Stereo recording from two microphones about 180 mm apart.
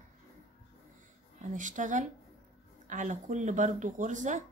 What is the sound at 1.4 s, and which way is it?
Speech, 45° right (ahead or behind).